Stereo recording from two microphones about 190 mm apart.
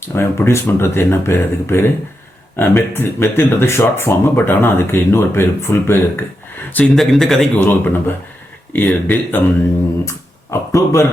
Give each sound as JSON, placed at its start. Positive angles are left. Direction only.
{"t": 0.1, "sound": "speech", "side_deg": 10}
{"t": 6.7, "sound": "speech", "side_deg": 0}